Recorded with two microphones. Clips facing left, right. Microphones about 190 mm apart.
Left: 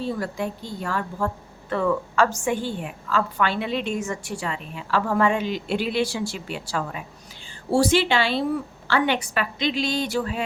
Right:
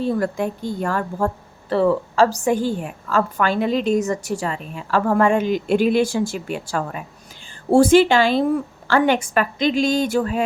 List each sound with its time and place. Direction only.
0.0 s a woman's voice: 50° right (ahead or behind)
1.7 s a woman's voice: 35° right (ahead or behind)